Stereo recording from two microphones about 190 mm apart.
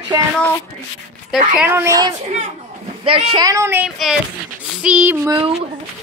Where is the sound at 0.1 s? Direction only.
15° right (ahead or behind).